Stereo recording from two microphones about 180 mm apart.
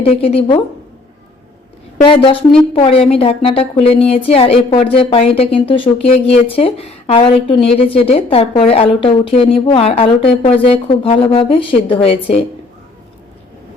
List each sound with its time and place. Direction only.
0.0 s speech: 30° left (ahead or behind)
2.0 s a woman's voice: 30° left (ahead or behind)